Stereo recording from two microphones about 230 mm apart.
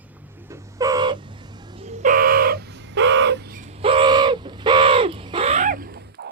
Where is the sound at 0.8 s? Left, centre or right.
Centre.